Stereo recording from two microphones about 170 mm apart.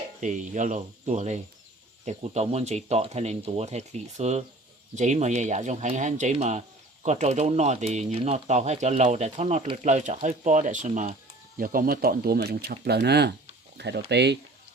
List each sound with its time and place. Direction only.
0.2 s speech: 45° right (ahead or behind); by 14.3 s 80° right